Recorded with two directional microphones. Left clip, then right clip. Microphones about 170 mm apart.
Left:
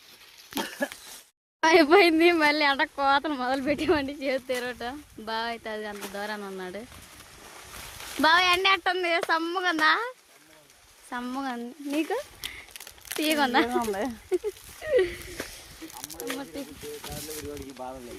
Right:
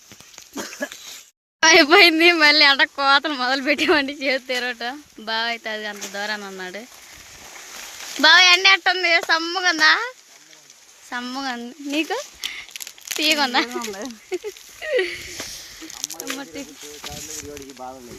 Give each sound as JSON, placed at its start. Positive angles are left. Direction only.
{"t": 1.6, "sound": "speech", "side_deg": 0}
{"t": 8.2, "sound": "speech", "side_deg": 0}
{"t": 12.7, "sound": "crumpling", "side_deg": 25}
{"t": 13.1, "sound": "speech", "side_deg": 15}
{"t": 13.8, "sound": "speech", "side_deg": 45}
{"t": 14.8, "sound": "a sound", "side_deg": 10}
{"t": 17.0, "sound": "speech", "side_deg": 45}
{"t": 17.7, "sound": "frying", "side_deg": 20}